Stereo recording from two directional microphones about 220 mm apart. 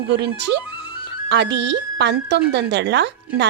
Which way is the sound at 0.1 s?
50° right (ahead or behind).